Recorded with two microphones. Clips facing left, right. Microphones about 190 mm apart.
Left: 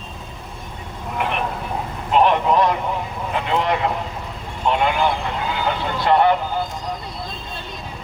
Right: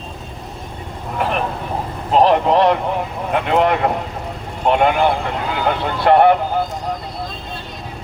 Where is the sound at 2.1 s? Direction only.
35° right (ahead or behind).